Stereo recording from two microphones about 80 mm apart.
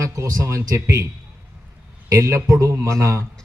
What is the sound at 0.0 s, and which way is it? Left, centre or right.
A man's voice, right.